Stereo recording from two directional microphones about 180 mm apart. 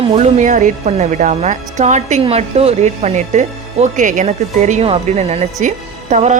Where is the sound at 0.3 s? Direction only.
45° right (ahead or behind).